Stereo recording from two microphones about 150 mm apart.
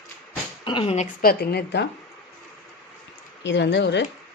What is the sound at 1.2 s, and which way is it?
Speech, 85° left.